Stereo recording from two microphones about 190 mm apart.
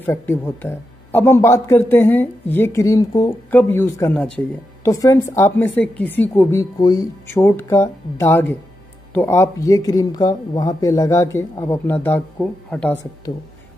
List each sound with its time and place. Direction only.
0.0 s speech: 10° left (ahead or behind)